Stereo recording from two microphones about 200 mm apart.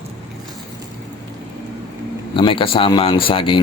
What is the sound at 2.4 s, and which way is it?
Speech, 25° left (ahead or behind).